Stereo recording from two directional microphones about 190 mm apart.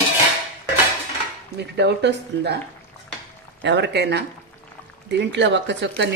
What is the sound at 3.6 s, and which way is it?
Speech, 70° right (ahead or behind).